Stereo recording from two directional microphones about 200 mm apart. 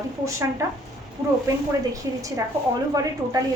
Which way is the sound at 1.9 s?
15° right (ahead or behind).